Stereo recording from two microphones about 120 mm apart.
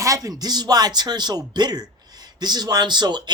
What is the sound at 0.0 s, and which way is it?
A man's voice, 25° right (ahead or behind).